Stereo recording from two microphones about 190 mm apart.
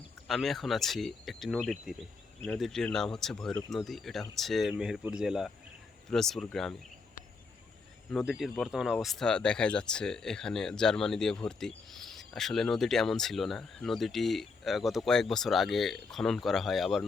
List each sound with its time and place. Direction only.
0.3 s speech: centre (ahead or behind)
8.1 s speech: centre (ahead or behind)